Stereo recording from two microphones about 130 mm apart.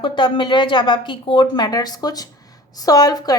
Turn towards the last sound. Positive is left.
turn(degrees=30)  # may be behind; listen again after turning